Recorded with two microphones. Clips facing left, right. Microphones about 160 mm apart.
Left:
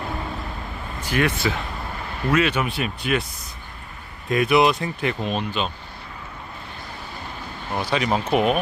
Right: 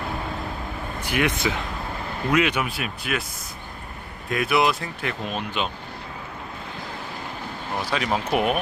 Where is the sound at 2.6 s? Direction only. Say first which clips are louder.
Left 4 dB; centre (ahead or behind).